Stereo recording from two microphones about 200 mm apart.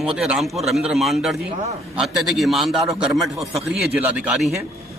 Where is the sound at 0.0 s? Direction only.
5° right (ahead or behind).